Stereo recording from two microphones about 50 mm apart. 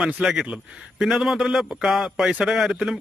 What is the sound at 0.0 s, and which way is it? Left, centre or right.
A man's voice, centre.